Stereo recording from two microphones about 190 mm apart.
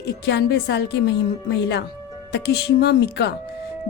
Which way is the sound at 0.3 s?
60° left (ahead or behind).